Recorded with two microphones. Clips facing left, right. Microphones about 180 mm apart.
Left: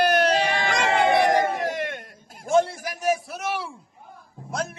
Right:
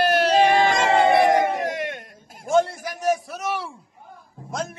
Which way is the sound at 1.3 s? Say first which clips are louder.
Right 2 dB; 20° right (ahead or behind).